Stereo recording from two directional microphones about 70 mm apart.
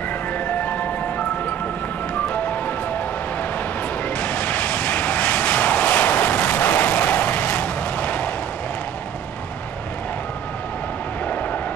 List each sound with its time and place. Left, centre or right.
4.2 s vehicle: left